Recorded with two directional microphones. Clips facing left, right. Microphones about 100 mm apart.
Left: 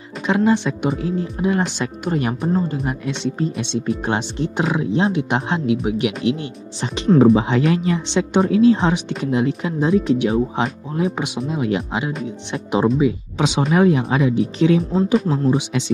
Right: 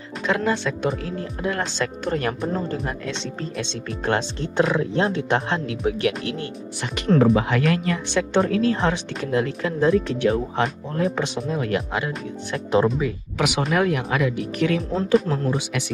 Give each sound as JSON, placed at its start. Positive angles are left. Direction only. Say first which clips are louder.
{"t": 0.3, "sound": "speech", "louder": "left 5 dB", "side_deg": 20}